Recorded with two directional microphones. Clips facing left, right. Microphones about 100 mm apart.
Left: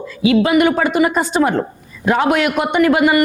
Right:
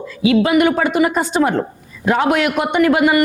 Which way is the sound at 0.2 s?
20° left (ahead or behind).